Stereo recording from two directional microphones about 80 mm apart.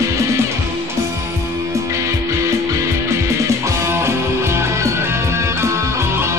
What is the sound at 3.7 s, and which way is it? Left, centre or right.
Music, right.